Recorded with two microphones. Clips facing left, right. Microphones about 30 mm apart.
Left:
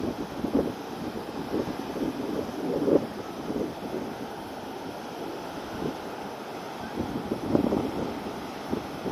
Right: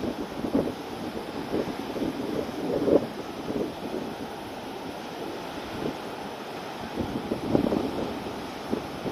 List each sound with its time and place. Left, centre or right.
2.9 s wind: right